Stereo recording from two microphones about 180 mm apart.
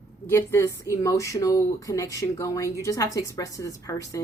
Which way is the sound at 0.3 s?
15° left (ahead or behind).